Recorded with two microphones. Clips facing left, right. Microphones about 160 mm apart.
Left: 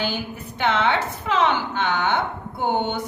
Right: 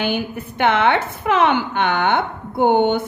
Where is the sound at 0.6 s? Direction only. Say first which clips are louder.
Right 4 dB; 55° right (ahead or behind).